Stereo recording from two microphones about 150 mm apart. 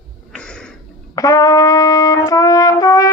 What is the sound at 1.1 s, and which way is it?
Trumpet, 25° left (ahead or behind).